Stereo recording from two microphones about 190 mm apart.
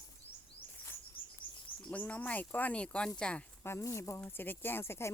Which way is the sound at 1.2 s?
30° left (ahead or behind).